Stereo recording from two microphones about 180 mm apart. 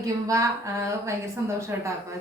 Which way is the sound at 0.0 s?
20° right (ahead or behind).